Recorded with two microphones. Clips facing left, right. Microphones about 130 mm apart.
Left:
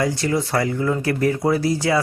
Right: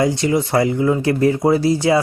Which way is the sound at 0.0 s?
20° right (ahead or behind).